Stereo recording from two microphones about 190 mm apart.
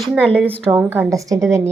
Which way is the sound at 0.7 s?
10° right (ahead or behind).